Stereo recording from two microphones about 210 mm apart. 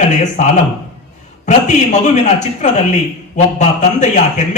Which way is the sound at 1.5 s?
35° left (ahead or behind).